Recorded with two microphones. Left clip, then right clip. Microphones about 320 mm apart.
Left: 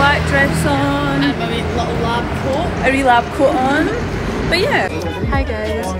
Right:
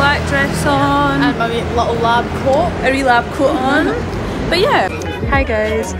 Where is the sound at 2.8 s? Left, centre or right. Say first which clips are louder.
Left 4 dB; centre.